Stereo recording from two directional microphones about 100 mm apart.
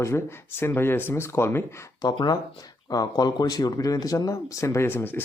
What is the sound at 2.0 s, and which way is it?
Speech, 45° left (ahead or behind).